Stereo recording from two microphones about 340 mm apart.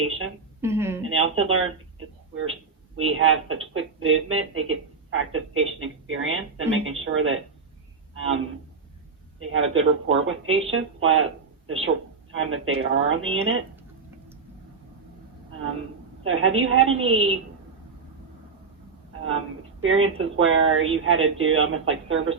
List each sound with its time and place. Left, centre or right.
0.6 s a sound: centre
1.0 s speech: right
8.1 s a sound: right
9.4 s speech: right
16.2 s speech: right
19.8 s speech: right